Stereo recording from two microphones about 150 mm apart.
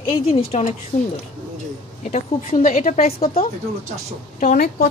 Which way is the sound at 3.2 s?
40° left (ahead or behind).